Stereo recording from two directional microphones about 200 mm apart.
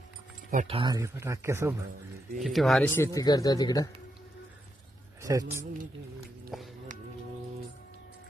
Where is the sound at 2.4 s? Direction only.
Centre (ahead or behind); by 3.9 s 20° left (ahead or behind).